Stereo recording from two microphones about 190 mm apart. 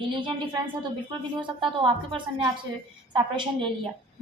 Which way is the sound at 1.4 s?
25° right (ahead or behind).